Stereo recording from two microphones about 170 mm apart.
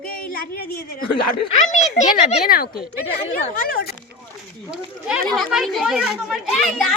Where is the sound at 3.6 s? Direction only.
65° left (ahead or behind).